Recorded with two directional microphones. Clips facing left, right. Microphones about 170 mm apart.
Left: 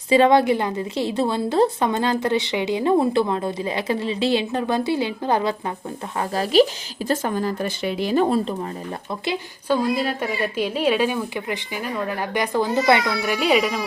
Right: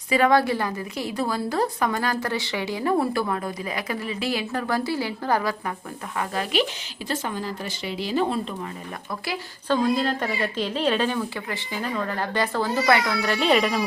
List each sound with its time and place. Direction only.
0.1 s a woman's voice: 25° left (ahead or behind)
6.1 s speech: 35° left (ahead or behind)
7.1 s a woman's voice: 45° left (ahead or behind)
9.6 s a woman's voice: 10° left (ahead or behind)